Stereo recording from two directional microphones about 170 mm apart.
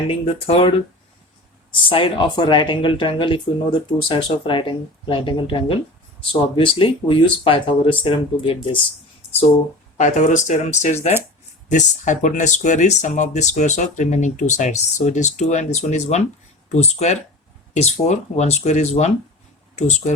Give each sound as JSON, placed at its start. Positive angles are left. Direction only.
{"t": 0.1, "sound": "speech", "side_deg": 35}
{"t": 1.7, "sound": "speech", "side_deg": 30}
{"t": 10.0, "sound": "speech", "side_deg": 45}